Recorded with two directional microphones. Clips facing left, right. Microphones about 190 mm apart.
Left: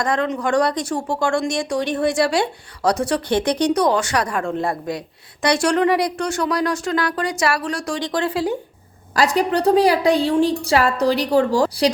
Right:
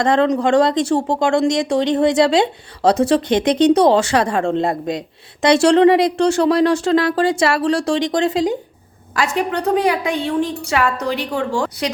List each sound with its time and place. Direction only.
0.0 s speech: 25° right (ahead or behind)
9.1 s a woman's voice: 35° left (ahead or behind)